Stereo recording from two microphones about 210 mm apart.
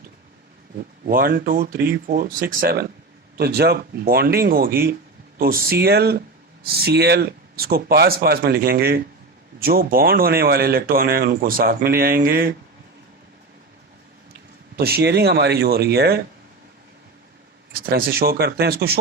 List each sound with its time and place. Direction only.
1.0 s speech: 45° right (ahead or behind)
14.8 s speech: 45° right (ahead or behind)
17.7 s speech: 45° right (ahead or behind)